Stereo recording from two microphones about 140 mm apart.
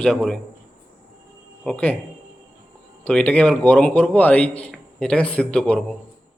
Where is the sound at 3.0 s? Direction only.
10° left (ahead or behind).